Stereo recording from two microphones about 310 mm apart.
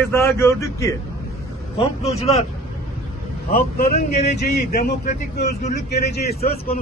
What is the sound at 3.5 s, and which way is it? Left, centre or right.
A man's voice, left.